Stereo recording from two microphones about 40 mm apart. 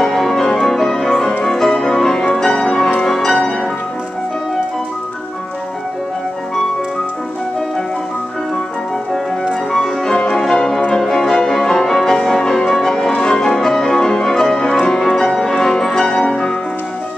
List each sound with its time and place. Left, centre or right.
0.0 s music: centre
9.7 s music: centre
10.1 s music: left